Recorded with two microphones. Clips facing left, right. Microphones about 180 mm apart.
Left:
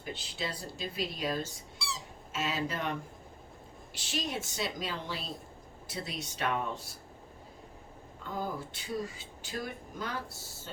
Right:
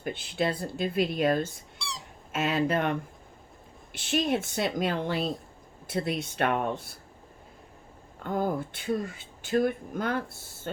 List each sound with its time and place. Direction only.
0.0 s speech: 55° right (ahead or behind)
3.9 s speech: 55° right (ahead or behind)
8.2 s speech: 55° right (ahead or behind)